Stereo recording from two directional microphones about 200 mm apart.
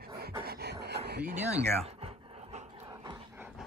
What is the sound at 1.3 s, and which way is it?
Dog, 30° right (ahead or behind).